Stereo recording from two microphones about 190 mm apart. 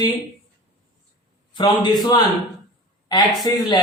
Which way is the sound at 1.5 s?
25° left (ahead or behind).